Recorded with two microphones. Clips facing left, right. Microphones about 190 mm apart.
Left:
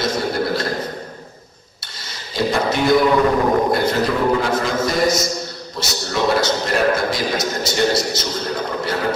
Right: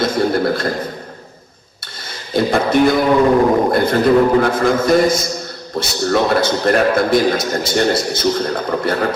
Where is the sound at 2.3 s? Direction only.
55° right (ahead or behind).